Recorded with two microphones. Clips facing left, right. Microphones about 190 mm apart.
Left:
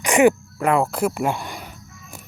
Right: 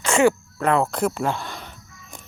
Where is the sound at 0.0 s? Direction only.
15° left (ahead or behind).